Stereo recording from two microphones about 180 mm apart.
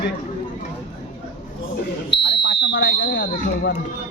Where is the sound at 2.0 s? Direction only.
80° left.